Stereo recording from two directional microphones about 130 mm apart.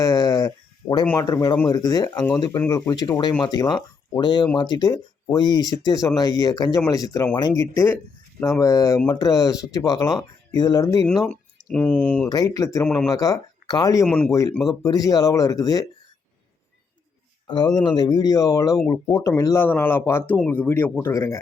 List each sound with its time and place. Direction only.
0.0 s a sound: 30° left (ahead or behind)
1.2 s speech: 30° left (ahead or behind)
11.0 s speech: 5° left (ahead or behind)
12.5 s speech: 25° left (ahead or behind)
12.8 s speech: 10° left (ahead or behind)
13.1 s speech: 25° left (ahead or behind)
14.0 s speech: 5° left (ahead or behind)
14.3 s speech: 25° left (ahead or behind)
17.4 s a sound: 35° left (ahead or behind)
17.8 s speech: 30° left (ahead or behind)
19.6 s speech: 15° left (ahead or behind)